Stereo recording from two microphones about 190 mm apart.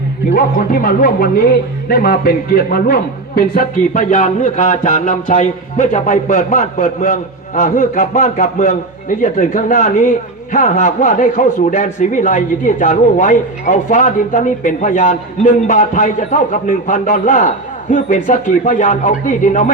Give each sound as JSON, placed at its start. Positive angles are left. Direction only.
{"t": 0.3, "sound": "a man's voice", "side_deg": 50}